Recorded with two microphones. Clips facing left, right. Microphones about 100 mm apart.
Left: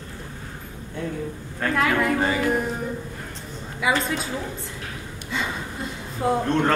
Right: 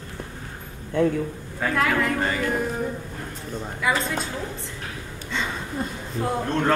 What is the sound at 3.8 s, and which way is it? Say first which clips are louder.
Speech: left 2 dB; 5° left (ahead or behind).